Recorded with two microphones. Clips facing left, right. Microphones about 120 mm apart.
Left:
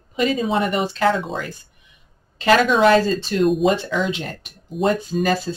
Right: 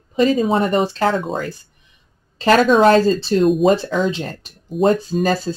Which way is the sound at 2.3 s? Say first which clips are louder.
Right 3 dB; 40° right (ahead or behind).